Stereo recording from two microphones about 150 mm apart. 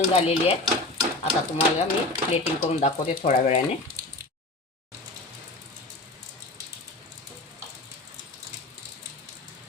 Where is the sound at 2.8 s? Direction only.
50° left (ahead or behind).